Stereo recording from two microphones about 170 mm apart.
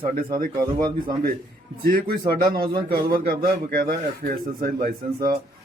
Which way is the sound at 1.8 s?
65° right (ahead or behind).